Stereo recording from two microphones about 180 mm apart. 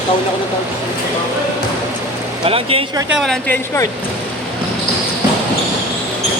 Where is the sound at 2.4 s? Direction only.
30° right (ahead or behind).